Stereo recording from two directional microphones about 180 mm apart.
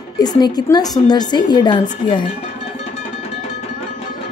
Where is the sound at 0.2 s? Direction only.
20° left (ahead or behind).